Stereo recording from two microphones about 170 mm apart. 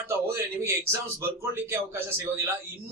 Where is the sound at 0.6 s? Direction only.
15° right (ahead or behind).